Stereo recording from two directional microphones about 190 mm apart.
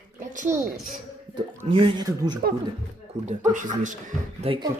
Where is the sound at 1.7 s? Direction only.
25° right (ahead or behind).